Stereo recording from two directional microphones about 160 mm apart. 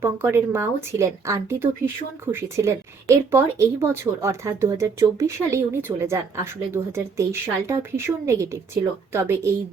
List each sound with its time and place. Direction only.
0.0 s speech: 15° right (ahead or behind)